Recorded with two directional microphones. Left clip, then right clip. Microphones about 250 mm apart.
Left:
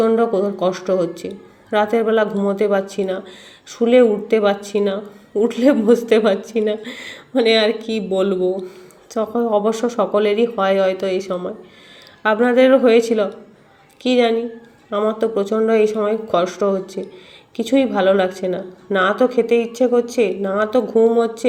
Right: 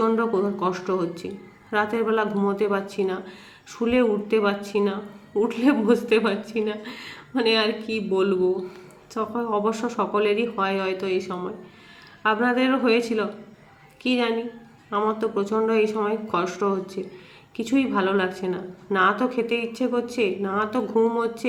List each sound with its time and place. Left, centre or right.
0.0 s a woman's voice: centre